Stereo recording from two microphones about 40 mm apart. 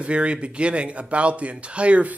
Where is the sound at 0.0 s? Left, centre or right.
Right.